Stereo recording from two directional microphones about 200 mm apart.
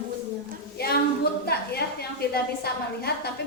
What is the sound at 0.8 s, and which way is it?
A woman's voice, 50° left (ahead or behind).